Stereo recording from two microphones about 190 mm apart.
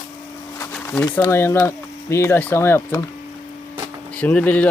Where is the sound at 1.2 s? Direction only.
15° left (ahead or behind).